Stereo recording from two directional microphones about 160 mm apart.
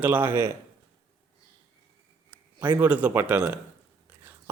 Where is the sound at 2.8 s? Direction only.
10° right (ahead or behind).